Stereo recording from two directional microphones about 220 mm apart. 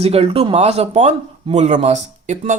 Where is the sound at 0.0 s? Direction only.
25° right (ahead or behind).